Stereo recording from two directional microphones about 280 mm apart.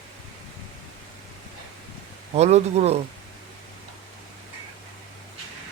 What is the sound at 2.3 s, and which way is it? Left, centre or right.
Speech, right.